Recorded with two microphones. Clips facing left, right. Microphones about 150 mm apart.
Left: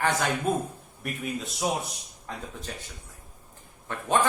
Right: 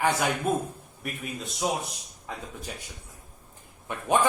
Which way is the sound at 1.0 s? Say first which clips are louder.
Left 3 dB; centre (ahead or behind).